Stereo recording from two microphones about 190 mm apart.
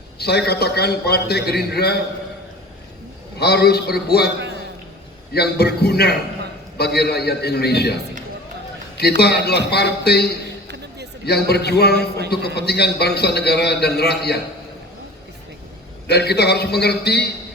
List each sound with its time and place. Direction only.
0.2 s a man's voice: 60° left (ahead or behind)
3.4 s a man's voice: 60° left (ahead or behind)
4.4 s a sound: 65° right (ahead or behind)
5.3 s a man's voice: 55° left (ahead or behind)
9.0 s a man's voice: 60° left (ahead or behind)
10.7 s a sound: 60° right (ahead or behind)
11.4 s a man's voice: 60° left (ahead or behind)
16.0 s a man's voice: 60° left (ahead or behind)